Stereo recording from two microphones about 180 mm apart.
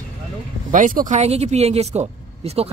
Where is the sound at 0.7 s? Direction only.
45° right (ahead or behind).